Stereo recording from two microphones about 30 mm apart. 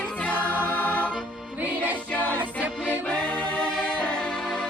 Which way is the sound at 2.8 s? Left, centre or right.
Left.